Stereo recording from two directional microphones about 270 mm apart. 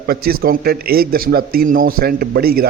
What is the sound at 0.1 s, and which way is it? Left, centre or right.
A man's voice, right.